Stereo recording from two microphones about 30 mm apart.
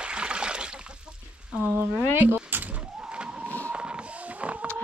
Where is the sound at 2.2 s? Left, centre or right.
Right.